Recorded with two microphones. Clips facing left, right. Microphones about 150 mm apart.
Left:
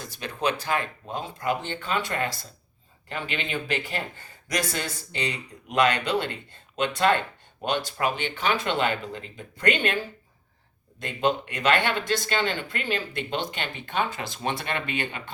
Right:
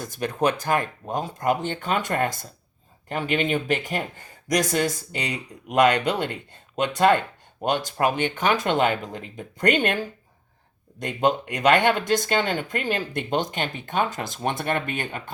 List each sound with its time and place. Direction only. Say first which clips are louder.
0.0 s speech: right 5 dB; 50° right (ahead or behind)
4.7 s speech: right 8 dB; 10° right (ahead or behind)
5.9 s speech: right 3 dB; 45° right (ahead or behind)
6.2 s speech: right 3 dB; 10° right (ahead or behind)
7.6 s speech: right 4 dB; 45° right (ahead or behind)
11.0 s speech: right 3 dB; 45° right (ahead or behind)